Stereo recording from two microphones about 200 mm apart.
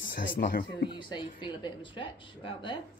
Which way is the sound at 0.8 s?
25° left (ahead or behind).